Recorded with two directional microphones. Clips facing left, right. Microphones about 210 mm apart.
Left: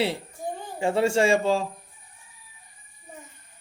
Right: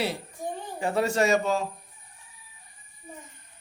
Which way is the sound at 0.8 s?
25° left (ahead or behind).